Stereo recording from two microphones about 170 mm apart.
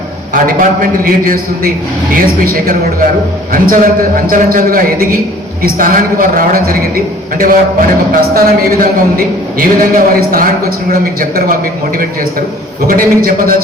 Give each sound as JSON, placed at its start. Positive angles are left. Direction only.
{"t": 0.3, "sound": "a man's voice", "side_deg": -55}
{"t": 12.9, "sound": "a man's voice", "side_deg": -55}